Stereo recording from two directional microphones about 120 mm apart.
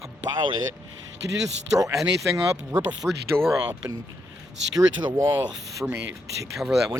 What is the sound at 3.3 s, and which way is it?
Speech, 5° left (ahead or behind).